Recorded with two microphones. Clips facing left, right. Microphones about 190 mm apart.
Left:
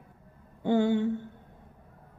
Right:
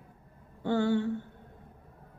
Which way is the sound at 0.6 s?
20° left (ahead or behind).